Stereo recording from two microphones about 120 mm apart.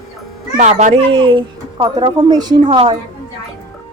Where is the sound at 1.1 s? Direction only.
45° right (ahead or behind).